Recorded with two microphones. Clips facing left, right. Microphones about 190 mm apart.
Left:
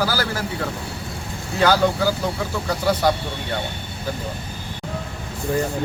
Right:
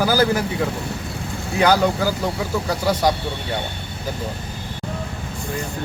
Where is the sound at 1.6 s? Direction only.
15° right (ahead or behind).